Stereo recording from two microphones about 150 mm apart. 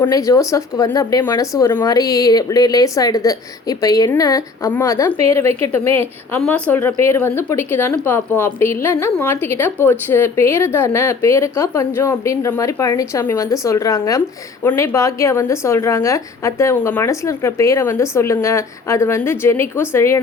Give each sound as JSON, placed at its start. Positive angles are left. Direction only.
{"t": 0.1, "sound": "a woman's voice", "side_deg": 20}